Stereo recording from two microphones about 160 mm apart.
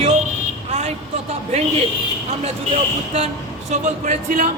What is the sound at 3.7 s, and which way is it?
Speech, 50° right (ahead or behind).